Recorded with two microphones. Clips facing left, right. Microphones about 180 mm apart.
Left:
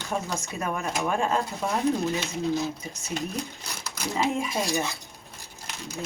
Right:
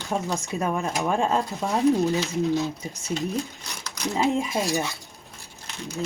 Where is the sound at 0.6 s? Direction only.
30° right (ahead or behind).